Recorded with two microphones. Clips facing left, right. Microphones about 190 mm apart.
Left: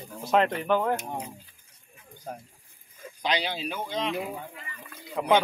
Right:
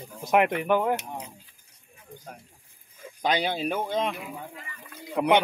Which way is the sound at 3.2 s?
50° right (ahead or behind).